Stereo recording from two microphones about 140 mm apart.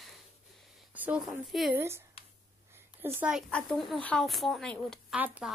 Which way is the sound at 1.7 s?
20° right (ahead or behind).